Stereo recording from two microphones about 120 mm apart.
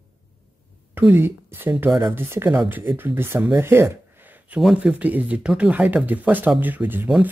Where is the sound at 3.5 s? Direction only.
20° right (ahead or behind).